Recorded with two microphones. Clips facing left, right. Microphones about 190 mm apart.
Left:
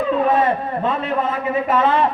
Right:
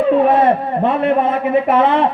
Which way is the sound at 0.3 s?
65° right (ahead or behind).